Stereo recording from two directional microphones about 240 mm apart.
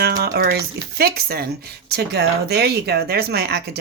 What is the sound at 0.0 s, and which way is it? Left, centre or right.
Speech, right.